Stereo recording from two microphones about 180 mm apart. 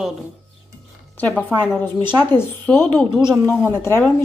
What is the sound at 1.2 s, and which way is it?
A woman's voice, 10° left (ahead or behind).